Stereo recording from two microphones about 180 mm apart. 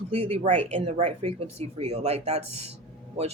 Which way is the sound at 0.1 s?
30° right (ahead or behind).